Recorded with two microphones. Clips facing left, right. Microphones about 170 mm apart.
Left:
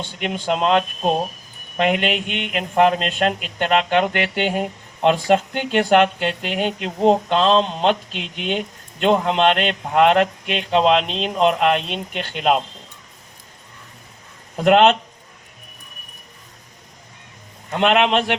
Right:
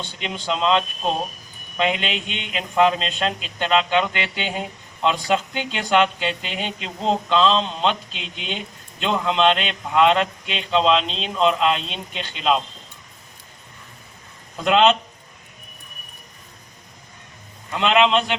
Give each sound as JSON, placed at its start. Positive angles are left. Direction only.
{"t": 0.2, "sound": "speech", "side_deg": 55}
{"t": 14.5, "sound": "speech", "side_deg": 55}
{"t": 17.7, "sound": "a man's voice", "side_deg": 55}